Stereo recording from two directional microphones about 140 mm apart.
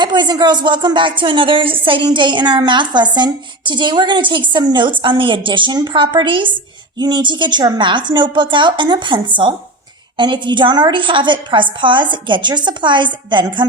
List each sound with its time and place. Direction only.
0.0 s a woman's voice: 30° right (ahead or behind)